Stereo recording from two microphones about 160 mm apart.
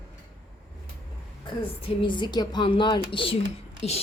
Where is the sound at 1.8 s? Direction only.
35° left (ahead or behind).